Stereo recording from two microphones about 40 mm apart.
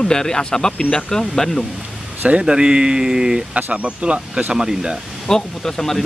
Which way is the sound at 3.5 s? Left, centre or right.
Right.